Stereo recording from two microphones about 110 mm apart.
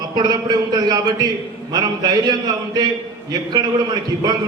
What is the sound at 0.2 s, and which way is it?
A man's voice, 40° right (ahead or behind).